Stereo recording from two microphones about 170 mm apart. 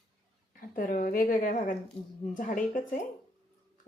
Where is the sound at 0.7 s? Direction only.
55° left (ahead or behind).